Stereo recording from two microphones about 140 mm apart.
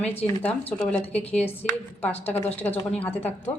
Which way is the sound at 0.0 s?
10° left (ahead or behind).